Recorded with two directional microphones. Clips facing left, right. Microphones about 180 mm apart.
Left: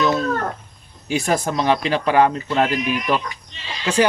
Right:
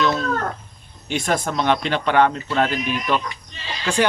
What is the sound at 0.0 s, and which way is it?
Chicken, 5° left (ahead or behind).